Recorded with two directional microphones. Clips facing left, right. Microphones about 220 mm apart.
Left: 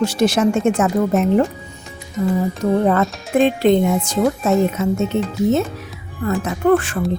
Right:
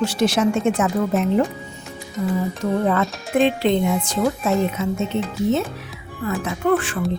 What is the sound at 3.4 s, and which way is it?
Speech, 45° left (ahead or behind).